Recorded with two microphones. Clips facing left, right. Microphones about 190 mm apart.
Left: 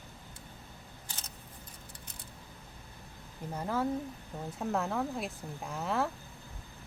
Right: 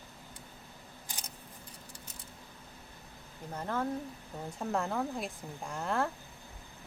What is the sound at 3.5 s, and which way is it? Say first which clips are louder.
Speech: left 2 dB; 10° left (ahead or behind).